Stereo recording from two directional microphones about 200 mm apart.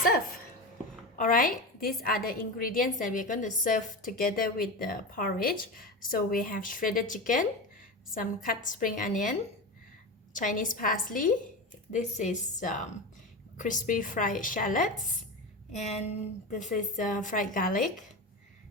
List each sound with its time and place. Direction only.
1.2 s a woman's voice: 45° left (ahead or behind)
10.3 s a woman's voice: 40° left (ahead or behind)